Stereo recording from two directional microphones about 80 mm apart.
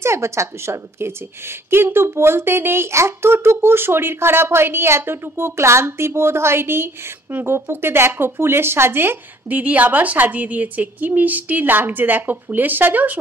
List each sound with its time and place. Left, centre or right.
0.0 s speech: right